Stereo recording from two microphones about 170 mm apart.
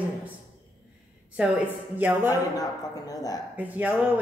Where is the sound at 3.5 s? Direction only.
10° right (ahead or behind).